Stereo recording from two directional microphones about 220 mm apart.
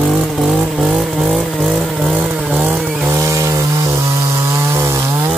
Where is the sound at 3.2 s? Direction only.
15° right (ahead or behind).